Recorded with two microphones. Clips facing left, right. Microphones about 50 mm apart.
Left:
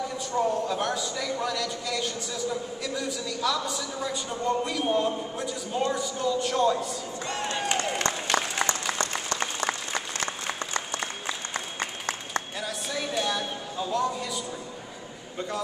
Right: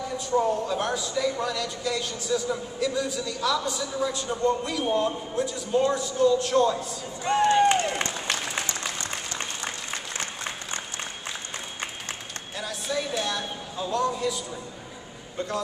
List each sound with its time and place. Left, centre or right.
0.3 s speech: centre
7.2 s speech: centre
12.5 s a man's voice: centre